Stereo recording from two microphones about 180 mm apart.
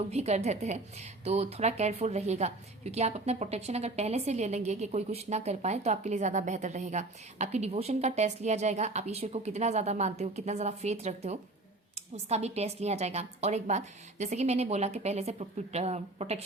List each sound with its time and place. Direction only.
0.1 s a woman's voice: 35° right (ahead or behind)